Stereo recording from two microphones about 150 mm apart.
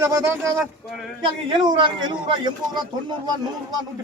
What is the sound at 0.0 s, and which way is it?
Speech, 20° right (ahead or behind).